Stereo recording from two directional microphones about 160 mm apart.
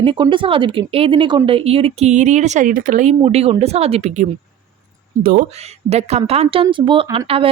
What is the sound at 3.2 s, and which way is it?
A woman's voice, 40° right (ahead or behind).